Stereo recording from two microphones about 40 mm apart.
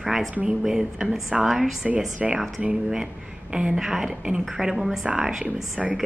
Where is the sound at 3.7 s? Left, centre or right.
Centre.